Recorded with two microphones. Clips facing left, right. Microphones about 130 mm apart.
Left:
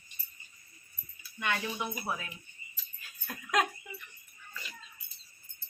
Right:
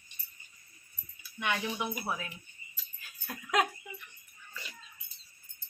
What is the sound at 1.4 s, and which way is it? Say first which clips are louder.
Speech: right 1 dB; 10° right (ahead or behind).